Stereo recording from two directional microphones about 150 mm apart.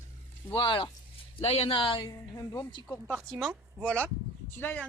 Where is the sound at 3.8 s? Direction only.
5° left (ahead or behind).